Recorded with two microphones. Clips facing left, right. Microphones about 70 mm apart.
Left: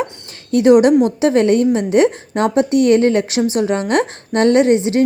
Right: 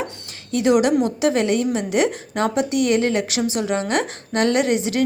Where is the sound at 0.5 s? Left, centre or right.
Left.